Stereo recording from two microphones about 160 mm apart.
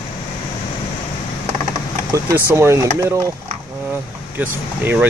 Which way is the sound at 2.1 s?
20° right (ahead or behind).